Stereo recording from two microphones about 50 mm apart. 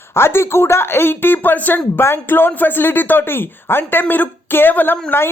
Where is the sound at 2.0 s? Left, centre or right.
Left.